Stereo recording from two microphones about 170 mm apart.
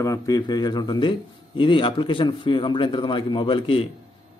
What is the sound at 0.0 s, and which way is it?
A man's voice, 20° left (ahead or behind).